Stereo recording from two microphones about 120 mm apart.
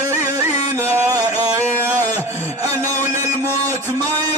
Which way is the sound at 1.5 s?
25° right (ahead or behind).